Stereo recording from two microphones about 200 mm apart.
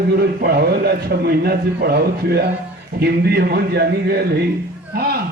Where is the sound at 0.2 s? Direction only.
50° right (ahead or behind).